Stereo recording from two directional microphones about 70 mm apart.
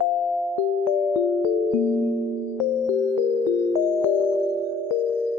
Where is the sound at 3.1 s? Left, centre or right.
Right.